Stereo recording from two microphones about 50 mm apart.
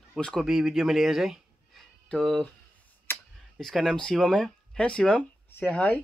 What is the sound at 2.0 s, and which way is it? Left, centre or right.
Speech, centre.